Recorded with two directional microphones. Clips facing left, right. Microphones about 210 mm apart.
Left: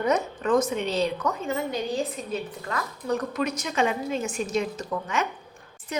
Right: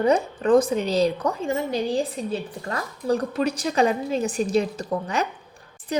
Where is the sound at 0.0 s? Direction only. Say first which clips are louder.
Right 4 dB; 30° right (ahead or behind).